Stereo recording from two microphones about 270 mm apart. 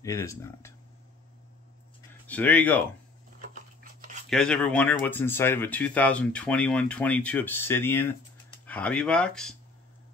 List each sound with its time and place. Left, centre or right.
0.0 s speech: centre
2.2 s speech: centre
3.3 s a sound: right
4.3 s speech: centre